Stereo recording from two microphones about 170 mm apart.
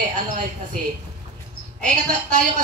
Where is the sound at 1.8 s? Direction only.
50° right (ahead or behind).